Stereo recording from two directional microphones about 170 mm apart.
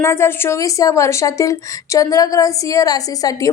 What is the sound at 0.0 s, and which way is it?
A woman's voice, 15° left (ahead or behind).